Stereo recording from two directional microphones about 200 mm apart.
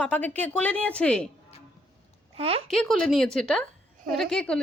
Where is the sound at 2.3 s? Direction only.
30° right (ahead or behind).